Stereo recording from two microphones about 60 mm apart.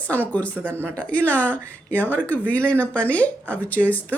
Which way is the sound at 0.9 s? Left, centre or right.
Left.